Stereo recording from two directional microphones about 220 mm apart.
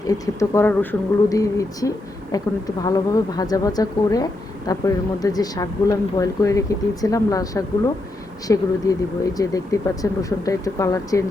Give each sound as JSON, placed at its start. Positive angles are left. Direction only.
{"t": 0.1, "sound": "speech", "side_deg": 15}